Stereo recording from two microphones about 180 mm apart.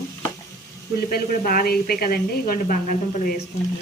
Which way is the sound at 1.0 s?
50° left (ahead or behind).